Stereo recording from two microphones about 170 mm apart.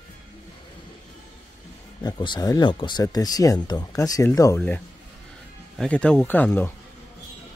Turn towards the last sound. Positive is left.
turn(degrees=10)  # may be behind; listen again after turning